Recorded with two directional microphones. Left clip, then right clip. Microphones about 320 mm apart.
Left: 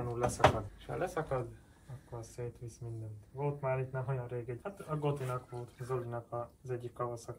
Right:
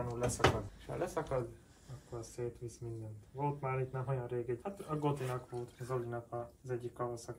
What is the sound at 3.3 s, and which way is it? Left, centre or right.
Speech, centre.